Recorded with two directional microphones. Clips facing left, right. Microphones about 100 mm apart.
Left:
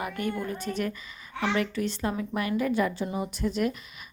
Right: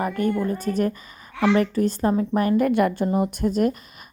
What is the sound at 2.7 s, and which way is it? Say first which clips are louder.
A woman's voice: right 7 dB; 60° right (ahead or behind).